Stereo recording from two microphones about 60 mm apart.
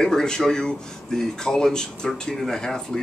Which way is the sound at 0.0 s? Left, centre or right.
Centre.